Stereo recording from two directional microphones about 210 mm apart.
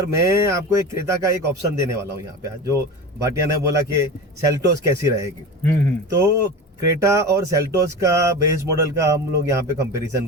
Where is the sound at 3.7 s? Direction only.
15° right (ahead or behind).